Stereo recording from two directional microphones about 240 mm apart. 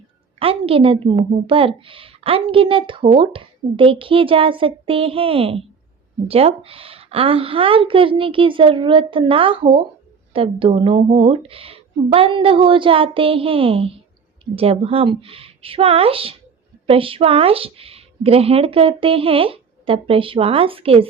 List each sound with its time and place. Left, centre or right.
0.3 s a woman's voice: right